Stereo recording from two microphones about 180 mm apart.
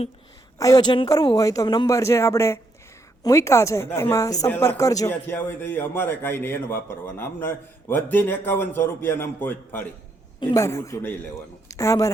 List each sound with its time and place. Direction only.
0.6 s a man's voice: 20° left (ahead or behind)